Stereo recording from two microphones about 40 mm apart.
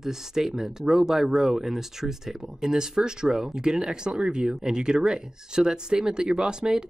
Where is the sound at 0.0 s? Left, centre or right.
Centre.